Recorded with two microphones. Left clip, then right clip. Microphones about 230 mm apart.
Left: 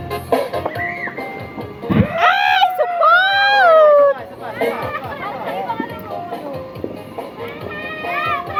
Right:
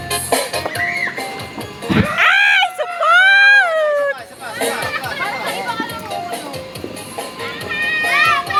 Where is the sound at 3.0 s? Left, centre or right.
Right.